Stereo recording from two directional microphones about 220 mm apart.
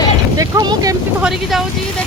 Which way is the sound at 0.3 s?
15° right (ahead or behind).